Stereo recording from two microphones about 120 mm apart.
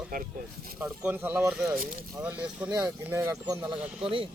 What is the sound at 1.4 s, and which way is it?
Speech, 5° right (ahead or behind).